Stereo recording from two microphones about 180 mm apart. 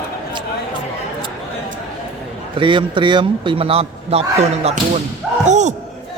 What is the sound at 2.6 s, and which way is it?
A man's voice, 25° right (ahead or behind).